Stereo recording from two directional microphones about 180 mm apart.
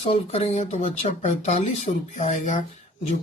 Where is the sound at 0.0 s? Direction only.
35° left (ahead or behind).